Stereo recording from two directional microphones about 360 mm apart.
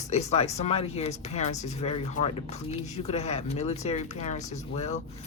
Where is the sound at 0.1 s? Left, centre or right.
Centre.